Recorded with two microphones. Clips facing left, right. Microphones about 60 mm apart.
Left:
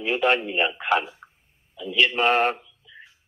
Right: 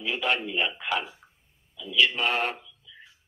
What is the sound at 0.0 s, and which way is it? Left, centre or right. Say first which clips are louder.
Speech: left 6 dB; left.